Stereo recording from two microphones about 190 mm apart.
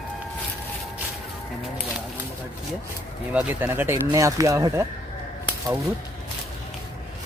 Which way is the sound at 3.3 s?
10° right (ahead or behind).